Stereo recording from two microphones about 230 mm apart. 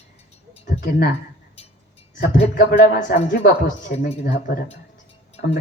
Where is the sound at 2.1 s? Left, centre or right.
Left.